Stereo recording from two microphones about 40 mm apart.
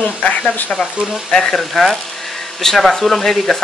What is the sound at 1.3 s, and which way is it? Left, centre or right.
Speech, centre.